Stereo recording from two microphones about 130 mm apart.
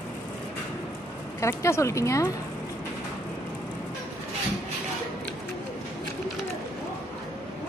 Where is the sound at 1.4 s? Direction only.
20° left (ahead or behind).